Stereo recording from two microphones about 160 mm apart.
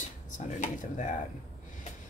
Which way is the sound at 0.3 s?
50° left (ahead or behind).